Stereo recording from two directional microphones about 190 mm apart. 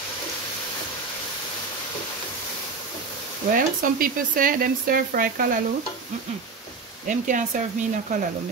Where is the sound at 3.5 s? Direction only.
45° right (ahead or behind).